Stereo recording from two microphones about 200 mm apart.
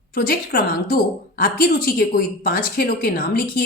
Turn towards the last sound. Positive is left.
turn(degrees=45)  # may be behind; listen again after turning